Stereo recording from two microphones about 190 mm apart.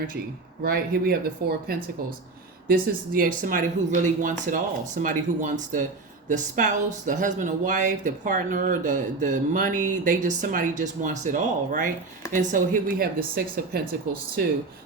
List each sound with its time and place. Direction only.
0.6 s speech: 55° right (ahead or behind)